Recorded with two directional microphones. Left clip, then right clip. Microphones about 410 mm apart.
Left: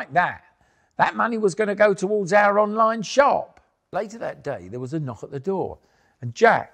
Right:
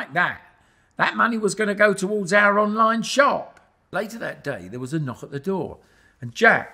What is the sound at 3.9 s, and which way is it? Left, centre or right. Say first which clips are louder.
A man's voice: even; right.